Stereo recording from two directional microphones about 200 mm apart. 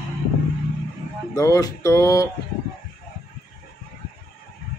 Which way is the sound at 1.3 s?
15° left (ahead or behind).